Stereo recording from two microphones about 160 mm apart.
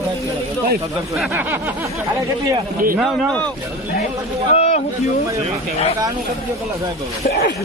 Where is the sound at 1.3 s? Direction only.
15° right (ahead or behind).